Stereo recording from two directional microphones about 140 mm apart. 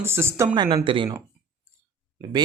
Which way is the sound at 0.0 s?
15° right (ahead or behind).